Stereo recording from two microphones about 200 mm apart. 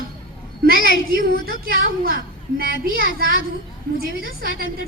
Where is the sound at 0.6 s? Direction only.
50° right (ahead or behind).